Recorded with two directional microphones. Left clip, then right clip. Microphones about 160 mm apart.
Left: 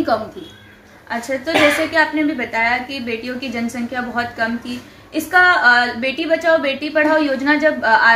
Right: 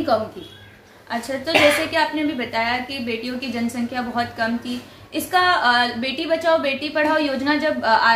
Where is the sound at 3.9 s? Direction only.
15° left (ahead or behind).